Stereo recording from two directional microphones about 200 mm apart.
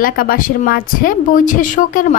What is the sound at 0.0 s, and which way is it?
Speech, 45° left (ahead or behind).